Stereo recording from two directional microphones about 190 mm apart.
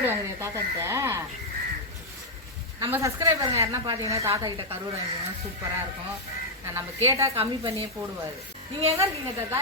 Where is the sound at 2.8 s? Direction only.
15° right (ahead or behind).